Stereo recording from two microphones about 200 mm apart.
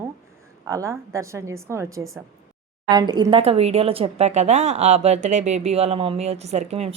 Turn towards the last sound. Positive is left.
turn(degrees=-30)  # may be behind; listen again after turning